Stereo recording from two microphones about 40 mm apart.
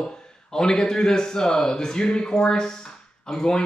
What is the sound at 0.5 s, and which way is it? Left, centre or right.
A man's voice, centre.